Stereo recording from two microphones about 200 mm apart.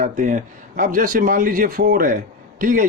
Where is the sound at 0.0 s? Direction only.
40° right (ahead or behind).